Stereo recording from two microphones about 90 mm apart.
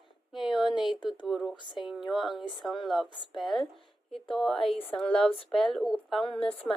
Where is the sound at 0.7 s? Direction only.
60° left (ahead or behind).